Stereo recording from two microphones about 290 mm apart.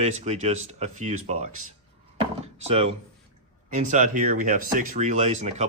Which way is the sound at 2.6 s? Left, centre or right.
Right.